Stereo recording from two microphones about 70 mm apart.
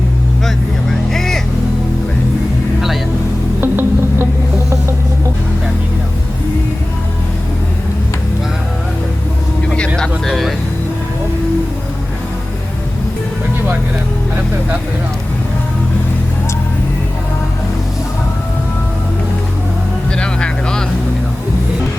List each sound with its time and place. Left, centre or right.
0.4 s vehicle: centre
3.6 s music: right
9.9 s a sound: centre
20.1 s vehicle: centre